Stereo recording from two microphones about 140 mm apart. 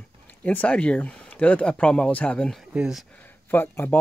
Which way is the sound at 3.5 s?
15° left (ahead or behind).